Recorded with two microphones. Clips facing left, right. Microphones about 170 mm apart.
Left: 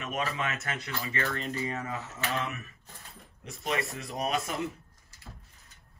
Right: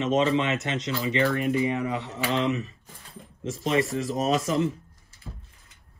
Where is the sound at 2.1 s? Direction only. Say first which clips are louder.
Right 8 dB; 90° right.